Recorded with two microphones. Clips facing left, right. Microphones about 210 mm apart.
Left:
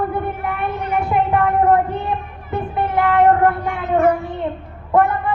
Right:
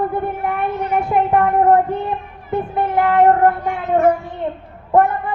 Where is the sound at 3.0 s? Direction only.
45° right (ahead or behind).